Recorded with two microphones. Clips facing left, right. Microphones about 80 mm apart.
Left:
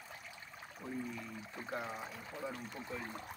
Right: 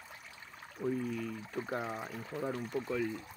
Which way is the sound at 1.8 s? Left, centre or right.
Right.